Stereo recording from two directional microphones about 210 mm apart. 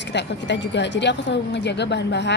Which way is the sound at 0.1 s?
55° left (ahead or behind).